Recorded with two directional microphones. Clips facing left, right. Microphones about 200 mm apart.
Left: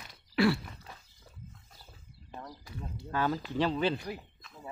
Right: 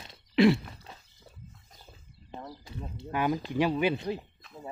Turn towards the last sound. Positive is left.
turn(degrees=-25)  # may be behind; listen again after turning